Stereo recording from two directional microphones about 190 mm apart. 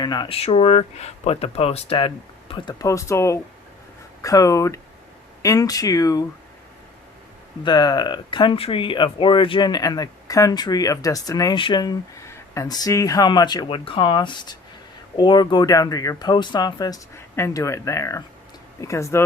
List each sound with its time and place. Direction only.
0.0 s speech: 25° left (ahead or behind)
7.6 s speech: 20° left (ahead or behind)